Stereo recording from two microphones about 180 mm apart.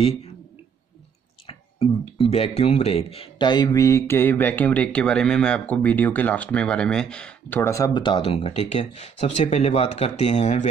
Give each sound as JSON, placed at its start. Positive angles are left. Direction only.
{"t": 0.0, "sound": "speech", "side_deg": 35}
{"t": 1.5, "sound": "speech", "side_deg": 35}